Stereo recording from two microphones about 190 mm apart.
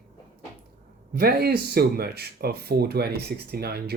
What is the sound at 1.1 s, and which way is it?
Speech, 55° right (ahead or behind).